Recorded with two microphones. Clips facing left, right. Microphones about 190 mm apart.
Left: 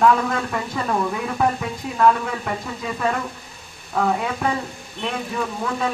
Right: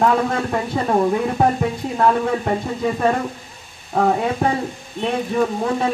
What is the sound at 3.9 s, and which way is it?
Speech, 35° right (ahead or behind).